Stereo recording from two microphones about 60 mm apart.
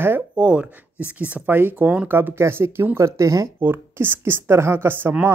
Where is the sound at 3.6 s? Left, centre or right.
Right.